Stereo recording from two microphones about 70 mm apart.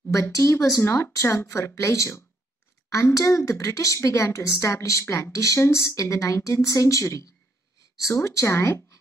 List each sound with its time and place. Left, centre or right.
0.1 s a woman's voice: left